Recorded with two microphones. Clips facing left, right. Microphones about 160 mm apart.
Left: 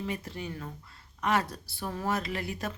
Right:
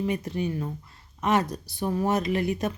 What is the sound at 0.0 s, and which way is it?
A woman's voice, 20° right (ahead or behind).